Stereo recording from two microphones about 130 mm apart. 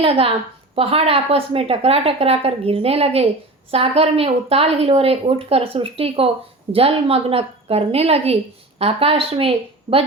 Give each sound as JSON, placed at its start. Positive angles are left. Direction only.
{"t": 0.0, "sound": "a woman's voice", "side_deg": -45}